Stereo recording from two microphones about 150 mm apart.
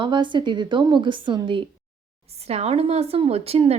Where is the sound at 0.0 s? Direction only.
30° right (ahead or behind).